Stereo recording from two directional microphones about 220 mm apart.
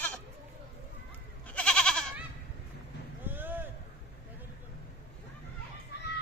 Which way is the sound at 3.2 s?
10° right (ahead or behind).